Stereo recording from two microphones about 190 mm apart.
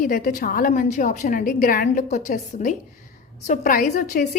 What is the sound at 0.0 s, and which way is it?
A woman's voice, 45° left (ahead or behind).